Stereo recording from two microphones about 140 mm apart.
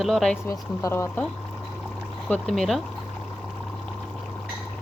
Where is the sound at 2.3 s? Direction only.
5° left (ahead or behind).